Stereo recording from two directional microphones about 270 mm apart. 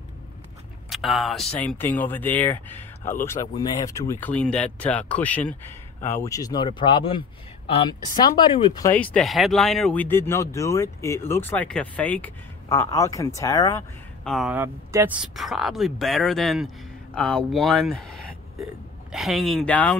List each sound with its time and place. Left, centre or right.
0.8 s speech: centre
8.9 s speech: centre
14.2 s speech: centre